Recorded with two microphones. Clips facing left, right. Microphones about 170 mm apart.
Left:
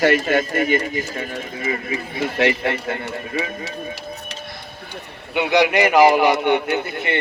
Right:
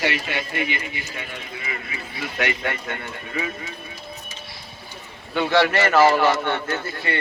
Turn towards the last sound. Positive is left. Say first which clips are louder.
# left 4 dB
turn(degrees=20)  # may be behind; listen again after turning